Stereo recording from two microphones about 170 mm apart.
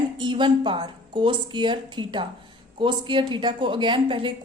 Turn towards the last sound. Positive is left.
turn(degrees=-30)  # may be behind; listen again after turning